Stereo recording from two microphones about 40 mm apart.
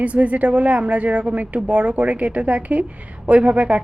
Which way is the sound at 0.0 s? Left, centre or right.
Right.